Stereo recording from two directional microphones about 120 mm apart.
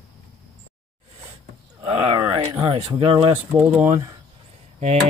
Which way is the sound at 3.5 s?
15° right (ahead or behind).